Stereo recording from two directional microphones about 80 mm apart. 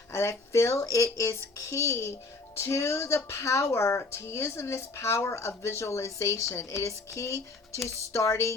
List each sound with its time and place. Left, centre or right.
0.1 s speech: left